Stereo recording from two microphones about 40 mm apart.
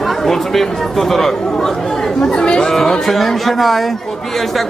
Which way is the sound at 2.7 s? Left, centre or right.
Centre.